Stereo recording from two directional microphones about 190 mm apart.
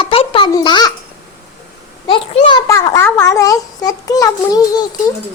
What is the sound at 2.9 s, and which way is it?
A child's voice, 15° left (ahead or behind).